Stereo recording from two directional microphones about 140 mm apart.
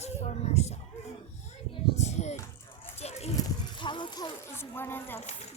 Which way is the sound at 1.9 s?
55° left (ahead or behind).